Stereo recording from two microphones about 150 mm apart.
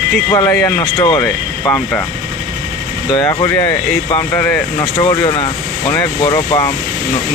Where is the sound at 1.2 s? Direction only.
10° left (ahead or behind).